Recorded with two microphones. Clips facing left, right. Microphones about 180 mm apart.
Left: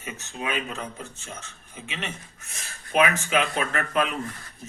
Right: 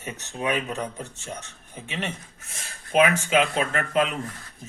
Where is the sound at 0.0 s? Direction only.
40° right (ahead or behind).